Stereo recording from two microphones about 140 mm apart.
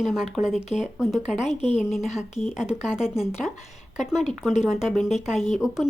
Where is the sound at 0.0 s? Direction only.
5° right (ahead or behind).